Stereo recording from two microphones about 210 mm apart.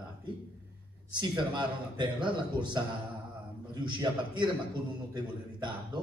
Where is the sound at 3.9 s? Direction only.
20° right (ahead or behind).